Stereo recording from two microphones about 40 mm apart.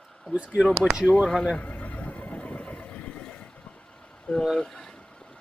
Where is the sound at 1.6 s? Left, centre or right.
Left.